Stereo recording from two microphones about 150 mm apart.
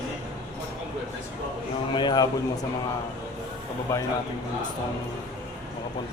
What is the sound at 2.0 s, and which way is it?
Speech, 30° left (ahead or behind).